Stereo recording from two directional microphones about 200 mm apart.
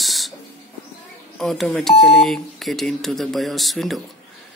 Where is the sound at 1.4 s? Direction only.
Centre (ahead or behind).